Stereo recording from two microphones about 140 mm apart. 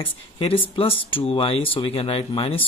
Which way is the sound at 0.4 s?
45° left (ahead or behind).